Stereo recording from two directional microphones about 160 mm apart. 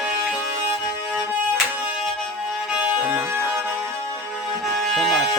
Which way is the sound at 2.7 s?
10° right (ahead or behind).